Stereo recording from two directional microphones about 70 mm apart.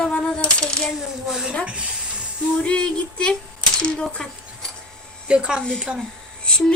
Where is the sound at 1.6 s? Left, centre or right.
Centre.